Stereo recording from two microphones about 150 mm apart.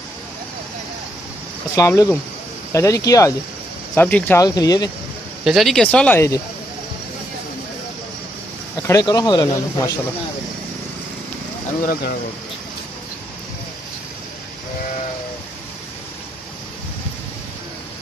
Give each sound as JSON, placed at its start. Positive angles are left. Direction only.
{"t": 1.8, "sound": "speech", "side_deg": 20}
{"t": 3.9, "sound": "speech", "side_deg": 15}
{"t": 4.4, "sound": "speech", "side_deg": 25}
{"t": 5.4, "sound": "speech", "side_deg": 0}
{"t": 8.8, "sound": "speech", "side_deg": 25}
{"t": 11.8, "sound": "speech", "side_deg": 80}